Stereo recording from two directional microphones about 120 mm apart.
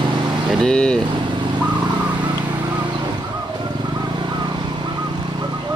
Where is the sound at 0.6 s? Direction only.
5° left (ahead or behind).